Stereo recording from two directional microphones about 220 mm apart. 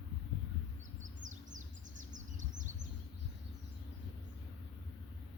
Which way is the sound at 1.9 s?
35° right (ahead or behind).